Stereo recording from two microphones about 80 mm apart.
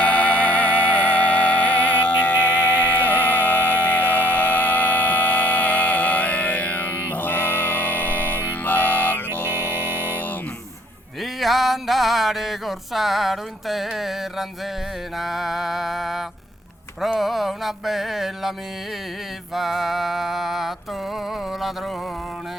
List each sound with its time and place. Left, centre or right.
0.0 s music: centre
9.3 s music: right
11.2 s music: centre
19.5 s music: centre